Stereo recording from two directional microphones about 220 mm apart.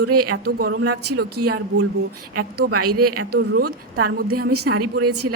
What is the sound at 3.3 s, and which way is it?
Speech, 45° right (ahead or behind).